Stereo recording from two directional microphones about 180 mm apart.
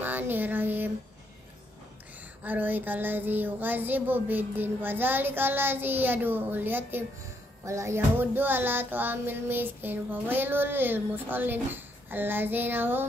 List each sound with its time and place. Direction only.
0.0 s child singing: 10° right (ahead or behind)
2.4 s music: 10° right (ahead or behind)